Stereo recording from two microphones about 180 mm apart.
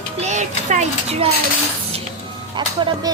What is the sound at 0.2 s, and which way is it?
Music, 40° right (ahead or behind).